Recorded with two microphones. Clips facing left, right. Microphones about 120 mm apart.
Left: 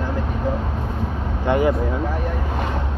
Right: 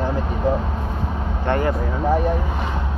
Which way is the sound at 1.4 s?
10° left (ahead or behind).